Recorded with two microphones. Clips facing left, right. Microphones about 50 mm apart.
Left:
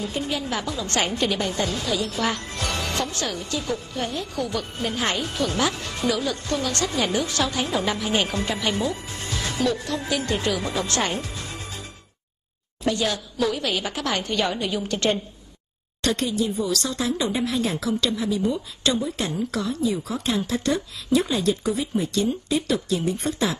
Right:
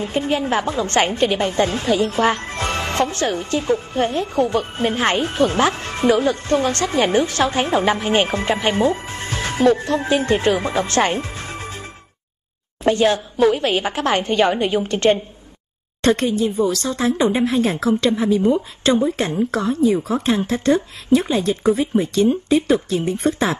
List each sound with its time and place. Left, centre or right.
0.0 s a woman's voice: right